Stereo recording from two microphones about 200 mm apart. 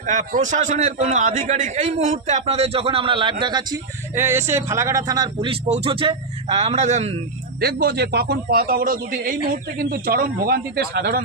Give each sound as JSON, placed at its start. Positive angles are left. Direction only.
{"t": 0.0, "sound": "a man's voice", "side_deg": -40}
{"t": 4.1, "sound": "speech", "side_deg": -10}
{"t": 7.6, "sound": "a man's voice", "side_deg": -50}